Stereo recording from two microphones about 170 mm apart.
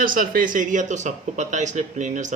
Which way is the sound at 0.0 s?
55° right (ahead or behind).